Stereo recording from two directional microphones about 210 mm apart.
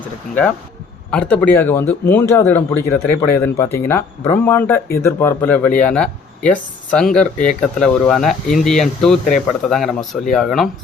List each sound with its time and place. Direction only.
1.1 s a man's voice: 5° left (ahead or behind)